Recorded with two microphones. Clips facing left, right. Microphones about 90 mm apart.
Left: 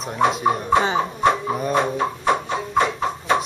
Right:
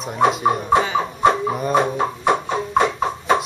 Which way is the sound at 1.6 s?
Centre (ahead or behind).